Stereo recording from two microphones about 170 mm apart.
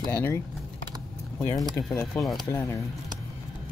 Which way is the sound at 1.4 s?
15° left (ahead or behind).